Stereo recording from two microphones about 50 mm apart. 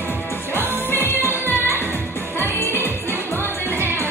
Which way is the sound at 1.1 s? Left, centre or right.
Left.